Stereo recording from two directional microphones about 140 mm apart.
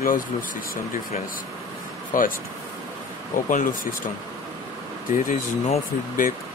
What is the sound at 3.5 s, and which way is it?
Speech, 70° left (ahead or behind).